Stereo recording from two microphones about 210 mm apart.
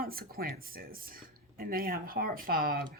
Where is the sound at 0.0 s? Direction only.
45° right (ahead or behind).